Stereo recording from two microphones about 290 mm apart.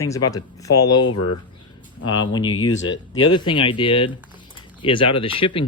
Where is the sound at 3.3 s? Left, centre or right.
Centre.